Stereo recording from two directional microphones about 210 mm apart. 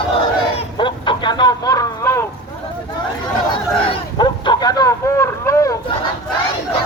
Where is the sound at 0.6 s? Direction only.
25° left (ahead or behind).